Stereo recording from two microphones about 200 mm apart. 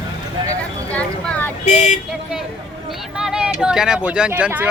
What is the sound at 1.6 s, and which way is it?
Vehicle, 35° left (ahead or behind).